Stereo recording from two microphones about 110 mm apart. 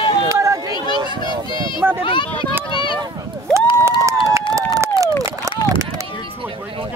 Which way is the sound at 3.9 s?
30° right (ahead or behind).